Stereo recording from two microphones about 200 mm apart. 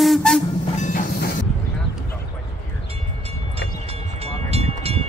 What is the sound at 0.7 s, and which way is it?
Train, 40° left (ahead or behind).